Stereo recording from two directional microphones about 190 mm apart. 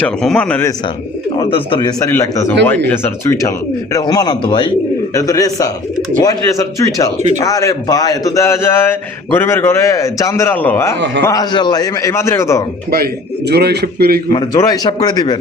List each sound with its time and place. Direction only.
0.0 s speech: 5° left (ahead or behind)
1.4 s a man's voice: 25° left (ahead or behind)
2.0 s a man's voice: 15° left (ahead or behind)
13.5 s a man's voice: 60° right (ahead or behind)
14.3 s a man's voice: 20° left (ahead or behind)